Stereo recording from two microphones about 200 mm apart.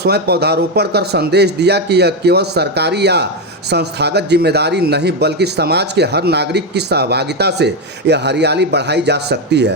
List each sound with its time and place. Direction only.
0.0 s speech: 55° right (ahead or behind)